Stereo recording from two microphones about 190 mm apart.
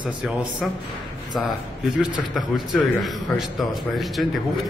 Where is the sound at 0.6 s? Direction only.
Centre (ahead or behind).